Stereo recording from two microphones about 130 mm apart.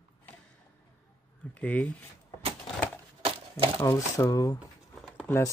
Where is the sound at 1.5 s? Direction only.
10° left (ahead or behind).